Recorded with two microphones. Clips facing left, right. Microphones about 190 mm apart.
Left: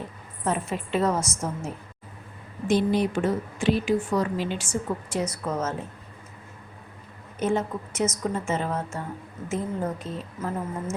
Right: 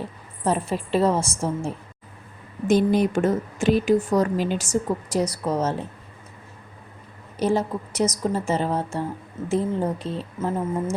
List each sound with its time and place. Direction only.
0.4 s a woman's voice: 35° right (ahead or behind)
2.6 s a woman's voice: 45° right (ahead or behind)
7.3 s a woman's voice: 35° right (ahead or behind)